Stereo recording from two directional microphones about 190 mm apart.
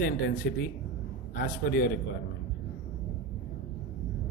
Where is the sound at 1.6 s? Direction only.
50° left (ahead or behind).